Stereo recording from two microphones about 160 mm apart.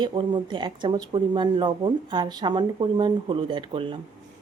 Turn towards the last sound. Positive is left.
turn(degrees=-35)  # may be behind; listen again after turning